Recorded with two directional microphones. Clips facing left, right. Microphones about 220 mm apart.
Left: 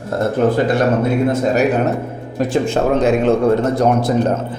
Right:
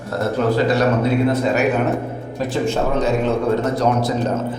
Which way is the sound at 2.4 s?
50° left (ahead or behind).